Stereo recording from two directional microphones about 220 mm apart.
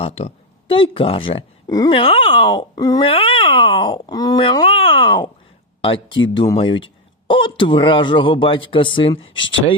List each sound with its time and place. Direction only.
0.0 s speech: 25° left (ahead or behind)